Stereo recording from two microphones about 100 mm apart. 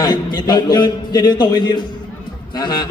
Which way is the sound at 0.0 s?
45° left (ahead or behind).